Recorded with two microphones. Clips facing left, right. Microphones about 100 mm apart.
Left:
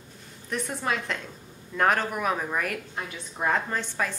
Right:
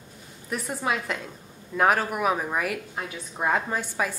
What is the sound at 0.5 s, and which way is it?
A woman's voice, 5° right (ahead or behind).